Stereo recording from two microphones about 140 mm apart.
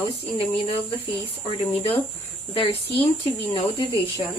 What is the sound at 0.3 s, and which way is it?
Speech, 40° left (ahead or behind).